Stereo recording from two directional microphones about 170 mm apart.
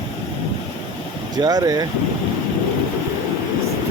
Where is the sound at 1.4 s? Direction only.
25° right (ahead or behind).